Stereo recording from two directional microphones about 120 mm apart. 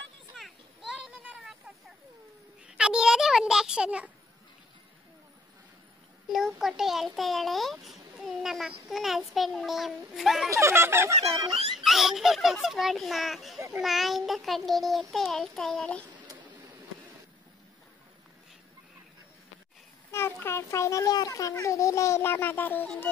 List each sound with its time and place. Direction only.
0.4 s children playing: centre (ahead or behind)
2.6 s a sound: 5° right (ahead or behind)
6.2 s a child's voice: 5° right (ahead or behind)
10.5 s speech: 20° right (ahead or behind)
11.7 s a child's voice: centre (ahead or behind)
20.1 s a child's voice: 20° left (ahead or behind)